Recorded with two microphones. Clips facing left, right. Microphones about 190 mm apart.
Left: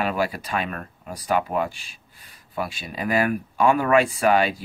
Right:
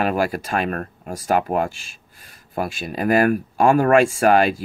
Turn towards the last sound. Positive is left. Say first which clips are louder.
# right 4 dB
turn(degrees=-45)  # may be behind; listen again after turning